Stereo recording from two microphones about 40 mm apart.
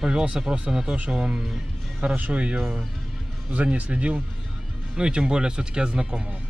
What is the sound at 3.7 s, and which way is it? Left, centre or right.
Speech, right.